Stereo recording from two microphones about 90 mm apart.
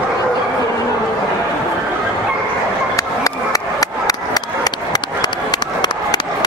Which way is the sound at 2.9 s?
40° left (ahead or behind).